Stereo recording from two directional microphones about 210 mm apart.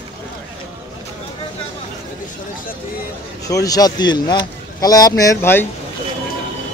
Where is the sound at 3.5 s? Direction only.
15° left (ahead or behind).